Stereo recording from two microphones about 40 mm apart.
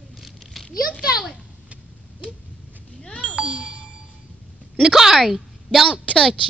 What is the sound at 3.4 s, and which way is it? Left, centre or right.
Ding, right.